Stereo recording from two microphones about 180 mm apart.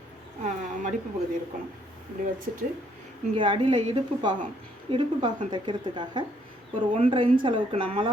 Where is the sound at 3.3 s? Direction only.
30° right (ahead or behind).